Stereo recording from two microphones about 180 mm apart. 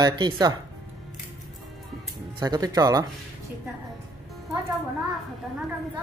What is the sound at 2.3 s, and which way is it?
Speech, 20° right (ahead or behind).